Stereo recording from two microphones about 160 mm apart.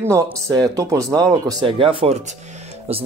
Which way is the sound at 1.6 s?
35° right (ahead or behind).